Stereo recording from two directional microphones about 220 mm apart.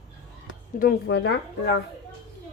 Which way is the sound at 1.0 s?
50° left (ahead or behind).